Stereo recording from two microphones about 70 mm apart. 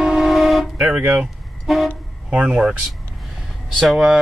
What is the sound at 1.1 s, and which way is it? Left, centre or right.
Speech, centre.